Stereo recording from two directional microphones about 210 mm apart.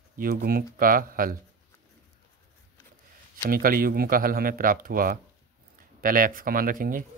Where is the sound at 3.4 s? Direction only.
45° right (ahead or behind).